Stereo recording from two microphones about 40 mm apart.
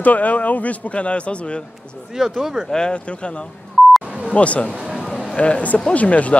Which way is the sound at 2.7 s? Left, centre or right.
Left.